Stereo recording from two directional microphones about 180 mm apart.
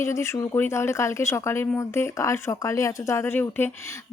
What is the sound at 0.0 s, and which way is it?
Speech, 15° left (ahead or behind).